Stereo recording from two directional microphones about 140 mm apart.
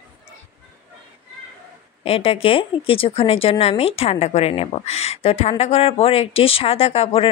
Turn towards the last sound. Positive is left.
turn(degrees=45)  # may be behind; listen again after turning